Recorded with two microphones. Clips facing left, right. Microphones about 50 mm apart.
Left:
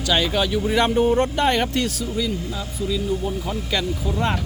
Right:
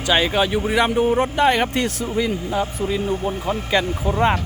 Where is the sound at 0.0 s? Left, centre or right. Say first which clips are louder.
Right 3 dB; right.